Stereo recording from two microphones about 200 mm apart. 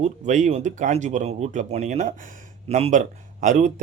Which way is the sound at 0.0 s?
35° right (ahead or behind).